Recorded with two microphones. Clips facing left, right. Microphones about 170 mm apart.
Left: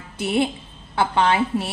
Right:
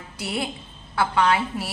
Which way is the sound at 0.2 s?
25° left (ahead or behind).